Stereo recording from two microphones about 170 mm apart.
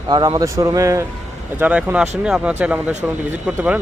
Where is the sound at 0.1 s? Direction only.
25° right (ahead or behind).